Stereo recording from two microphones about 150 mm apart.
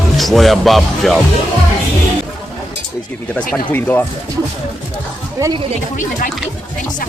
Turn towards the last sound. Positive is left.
turn(degrees=60)  # may be behind; listen again after turning